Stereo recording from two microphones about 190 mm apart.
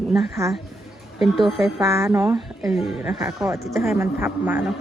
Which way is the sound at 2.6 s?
Centre (ahead or behind).